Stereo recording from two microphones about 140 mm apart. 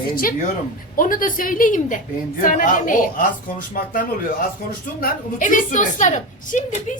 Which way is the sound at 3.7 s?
90° left.